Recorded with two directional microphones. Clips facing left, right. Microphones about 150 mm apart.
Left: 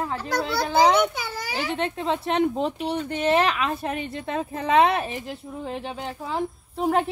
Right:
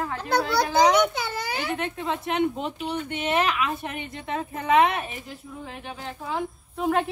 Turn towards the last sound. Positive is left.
turn(degrees=30)  # may be behind; listen again after turning